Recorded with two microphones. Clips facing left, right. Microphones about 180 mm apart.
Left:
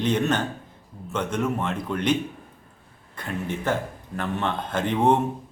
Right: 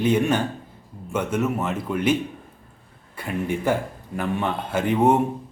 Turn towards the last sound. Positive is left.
turn(degrees=-10)  # may be behind; listen again after turning